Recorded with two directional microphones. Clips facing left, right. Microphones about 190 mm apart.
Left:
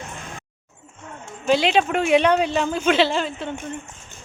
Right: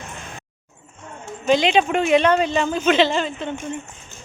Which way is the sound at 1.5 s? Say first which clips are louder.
Right 1 dB; 5° left (ahead or behind).